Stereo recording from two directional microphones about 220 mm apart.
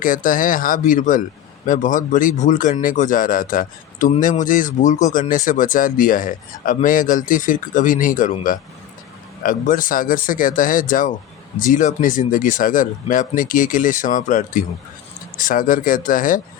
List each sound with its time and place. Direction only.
0.0 s speech: 40° left (ahead or behind)